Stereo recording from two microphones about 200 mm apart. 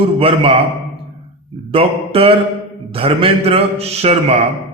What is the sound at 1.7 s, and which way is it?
A man's voice, 30° right (ahead or behind).